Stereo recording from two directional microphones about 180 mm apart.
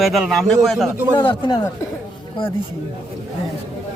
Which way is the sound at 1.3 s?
25° left (ahead or behind).